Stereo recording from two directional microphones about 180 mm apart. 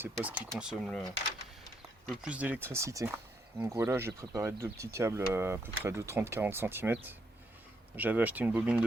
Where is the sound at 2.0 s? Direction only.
5° right (ahead or behind).